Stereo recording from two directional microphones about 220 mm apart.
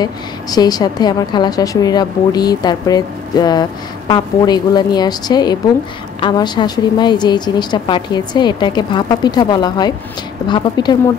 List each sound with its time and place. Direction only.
0.0 s a woman's voice: 20° left (ahead or behind)